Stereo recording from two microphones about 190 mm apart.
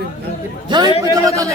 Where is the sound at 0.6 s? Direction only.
25° right (ahead or behind).